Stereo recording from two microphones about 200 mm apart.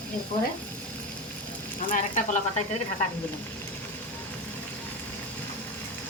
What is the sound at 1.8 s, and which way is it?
Speech, 40° left (ahead or behind).